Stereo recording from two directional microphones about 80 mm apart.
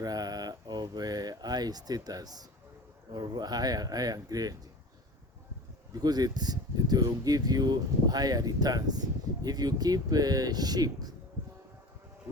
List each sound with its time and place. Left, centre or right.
0.0 s speech: right
5.9 s speech: right